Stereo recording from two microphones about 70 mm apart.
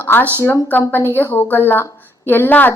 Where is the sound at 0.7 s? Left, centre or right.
Left.